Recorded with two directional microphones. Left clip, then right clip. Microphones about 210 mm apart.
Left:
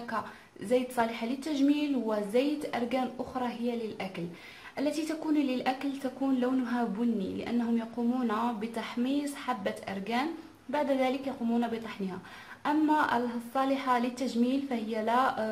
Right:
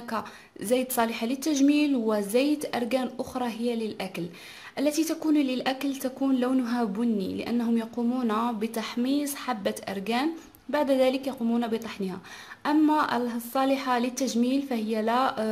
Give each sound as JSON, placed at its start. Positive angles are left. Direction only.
{"t": 0.7, "sound": "a woman's voice", "side_deg": -40}